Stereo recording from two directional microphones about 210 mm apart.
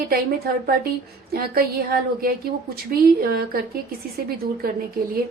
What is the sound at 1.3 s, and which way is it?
A woman's voice, 45° right (ahead or behind).